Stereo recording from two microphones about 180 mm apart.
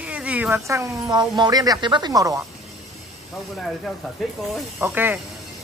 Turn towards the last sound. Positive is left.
turn(degrees=-10)  # may be behind; listen again after turning